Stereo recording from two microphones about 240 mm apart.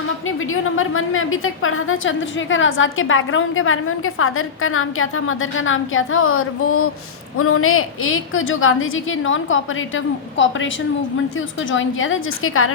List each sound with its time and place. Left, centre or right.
0.3 s a woman's voice: left